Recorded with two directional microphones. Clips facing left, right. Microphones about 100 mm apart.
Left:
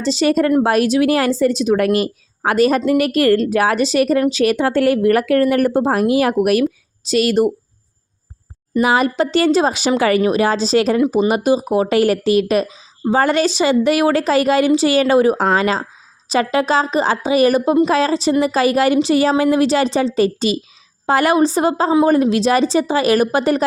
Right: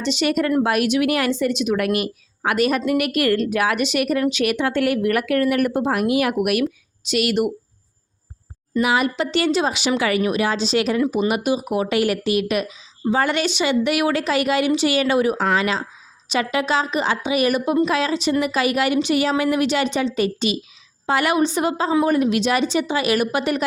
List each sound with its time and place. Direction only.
0.0 s speech: 35° left (ahead or behind)
8.8 s speech: 40° left (ahead or behind)